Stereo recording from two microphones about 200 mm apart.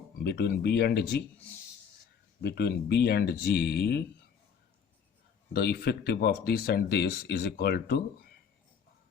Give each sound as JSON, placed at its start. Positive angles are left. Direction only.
{"t": 0.2, "sound": "speech", "side_deg": 55}
{"t": 2.4, "sound": "speech", "side_deg": 55}
{"t": 5.5, "sound": "speech", "side_deg": 55}